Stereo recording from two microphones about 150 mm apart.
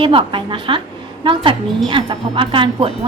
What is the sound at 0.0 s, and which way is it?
A woman's voice, 35° right (ahead or behind).